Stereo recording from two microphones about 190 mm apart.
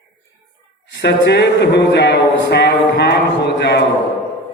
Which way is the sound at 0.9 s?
60° left (ahead or behind).